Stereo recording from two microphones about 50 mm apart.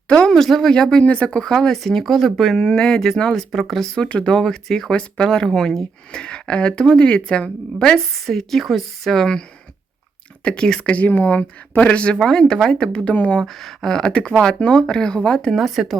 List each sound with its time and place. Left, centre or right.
0.3 s speech: centre
0.7 s speech: centre
1.5 s speech: centre
3.3 s a woman's voice: centre
3.9 s speech: left
4.4 s speech: centre
7.9 s a woman's voice: centre
9.1 s speech: centre
10.4 s speech: centre
12.2 s speech: centre
13.1 s speech: left
13.4 s a woman's voice: centre
14.1 s speech: left
15.5 s a woman's voice: centre